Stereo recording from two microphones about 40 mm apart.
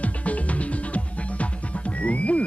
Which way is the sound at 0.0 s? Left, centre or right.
Left.